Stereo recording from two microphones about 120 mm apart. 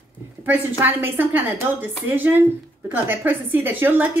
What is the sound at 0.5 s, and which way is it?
A woman's voice, 15° right (ahead or behind).